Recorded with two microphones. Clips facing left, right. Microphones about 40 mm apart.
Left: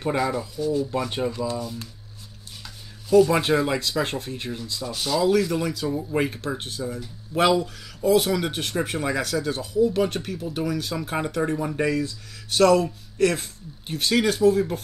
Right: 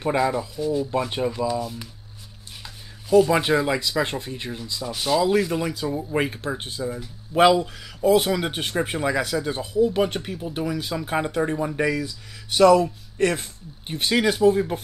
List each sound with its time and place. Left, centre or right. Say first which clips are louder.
0.0 s speech: right 2 dB; centre
2.6 s a sound: right 1 dB; right
3.6 s speech: right 1 dB; centre
11.5 s speech: even; centre
13.2 s speech: left 1 dB; centre